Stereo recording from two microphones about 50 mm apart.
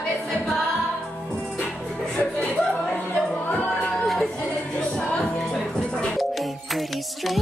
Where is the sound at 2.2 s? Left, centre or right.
Left.